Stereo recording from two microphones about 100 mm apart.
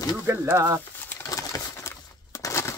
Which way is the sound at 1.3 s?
35° left (ahead or behind).